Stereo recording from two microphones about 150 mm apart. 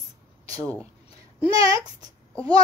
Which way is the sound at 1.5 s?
25° right (ahead or behind).